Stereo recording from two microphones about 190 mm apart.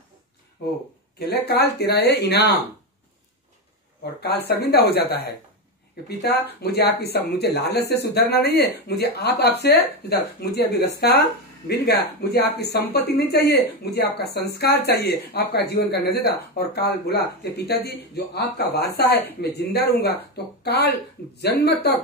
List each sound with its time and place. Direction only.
0.6 s speech: 60° left (ahead or behind)
4.0 s speech: 55° left (ahead or behind)
6.6 s speech: 55° left (ahead or behind)